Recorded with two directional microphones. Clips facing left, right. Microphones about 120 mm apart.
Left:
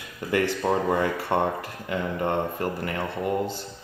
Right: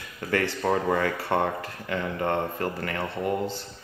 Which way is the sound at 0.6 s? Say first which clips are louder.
Left 1 dB; centre (ahead or behind).